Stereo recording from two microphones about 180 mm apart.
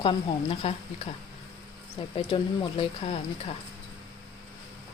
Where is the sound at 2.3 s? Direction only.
30° left (ahead or behind).